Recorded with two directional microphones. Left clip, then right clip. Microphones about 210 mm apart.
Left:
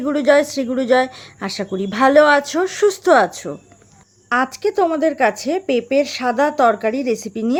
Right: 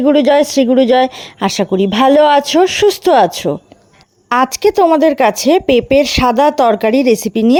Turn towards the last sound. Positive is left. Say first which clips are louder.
# right 9 dB
turn(degrees=-35)  # may be behind; listen again after turning